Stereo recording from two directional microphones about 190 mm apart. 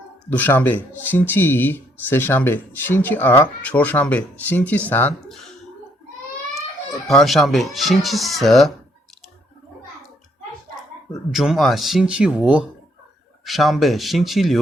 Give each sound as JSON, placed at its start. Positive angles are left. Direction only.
{"t": 0.3, "sound": "speech", "side_deg": 10}
{"t": 7.1, "sound": "speech", "side_deg": 0}
{"t": 11.3, "sound": "speech", "side_deg": 0}